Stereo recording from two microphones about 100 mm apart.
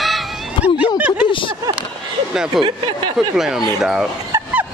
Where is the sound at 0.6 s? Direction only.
60° left (ahead or behind).